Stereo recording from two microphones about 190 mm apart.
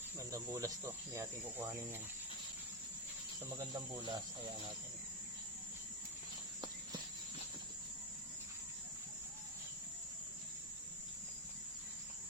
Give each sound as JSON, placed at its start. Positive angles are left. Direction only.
{"t": 0.3, "sound": "speech", "side_deg": -15}
{"t": 3.7, "sound": "speech", "side_deg": -20}